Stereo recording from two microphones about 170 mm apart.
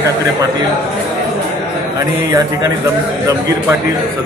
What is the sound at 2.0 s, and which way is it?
Speech, 20° right (ahead or behind).